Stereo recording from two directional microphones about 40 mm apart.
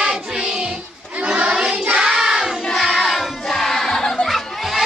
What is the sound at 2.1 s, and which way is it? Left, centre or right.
Child singing, centre.